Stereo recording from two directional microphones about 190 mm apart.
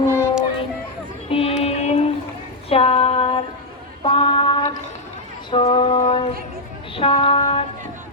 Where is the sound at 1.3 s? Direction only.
30° left (ahead or behind).